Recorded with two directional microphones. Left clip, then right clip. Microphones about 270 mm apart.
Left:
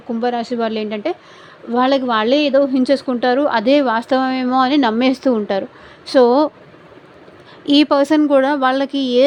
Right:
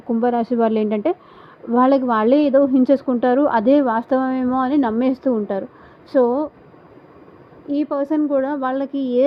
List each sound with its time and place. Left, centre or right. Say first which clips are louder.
0.1 s a woman's voice: right 1 dB; centre; by 6.5 s left
7.7 s speech: left 8 dB; left